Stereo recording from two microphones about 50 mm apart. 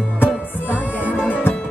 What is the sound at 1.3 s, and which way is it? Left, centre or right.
Music, left.